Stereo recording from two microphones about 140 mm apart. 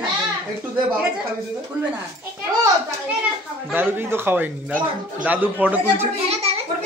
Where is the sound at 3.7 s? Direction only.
15° right (ahead or behind).